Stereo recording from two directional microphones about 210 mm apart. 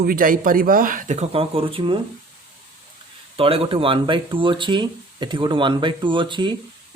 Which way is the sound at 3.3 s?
25° right (ahead or behind).